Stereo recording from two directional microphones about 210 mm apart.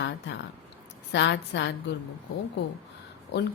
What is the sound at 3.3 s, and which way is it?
Speech, 55° left (ahead or behind).